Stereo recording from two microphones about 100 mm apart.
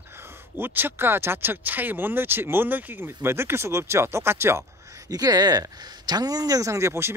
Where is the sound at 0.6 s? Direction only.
20° right (ahead or behind).